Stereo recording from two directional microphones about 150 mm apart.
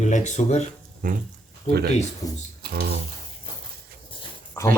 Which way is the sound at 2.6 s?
90° right.